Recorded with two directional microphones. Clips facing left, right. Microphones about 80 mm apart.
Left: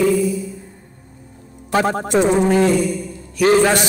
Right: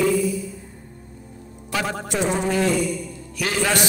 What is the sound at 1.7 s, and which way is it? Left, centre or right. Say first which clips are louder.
A man's voice: left 8 dB; left.